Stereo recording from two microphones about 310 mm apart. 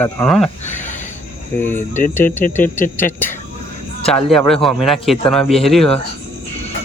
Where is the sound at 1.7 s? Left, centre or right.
Left.